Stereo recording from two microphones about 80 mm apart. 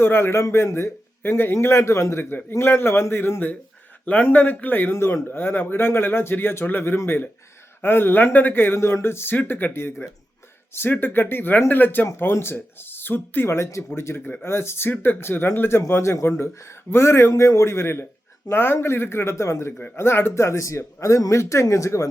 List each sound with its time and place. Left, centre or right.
0.0 s a man's voice: left